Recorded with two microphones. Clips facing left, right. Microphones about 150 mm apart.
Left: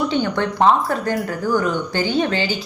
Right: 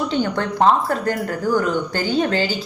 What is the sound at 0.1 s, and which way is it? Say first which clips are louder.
A woman's voice: left 1 dB; 40° right (ahead or behind).